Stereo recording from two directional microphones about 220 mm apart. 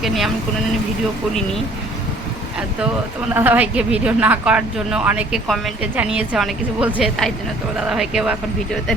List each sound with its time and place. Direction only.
0.0 s speech: centre (ahead or behind)
3.3 s speech: 10° right (ahead or behind)